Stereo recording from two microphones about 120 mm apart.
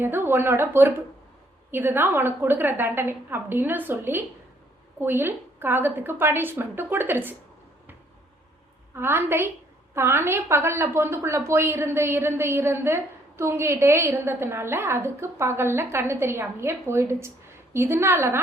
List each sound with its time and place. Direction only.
0.0 s a woman's voice: 20° right (ahead or behind)
9.0 s a woman's voice: 20° right (ahead or behind)